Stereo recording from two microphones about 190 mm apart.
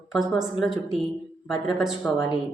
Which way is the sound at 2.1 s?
25° left (ahead or behind).